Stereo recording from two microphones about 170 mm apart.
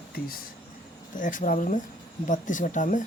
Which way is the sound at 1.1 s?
50° left (ahead or behind).